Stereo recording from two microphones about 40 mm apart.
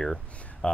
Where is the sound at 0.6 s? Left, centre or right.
Left.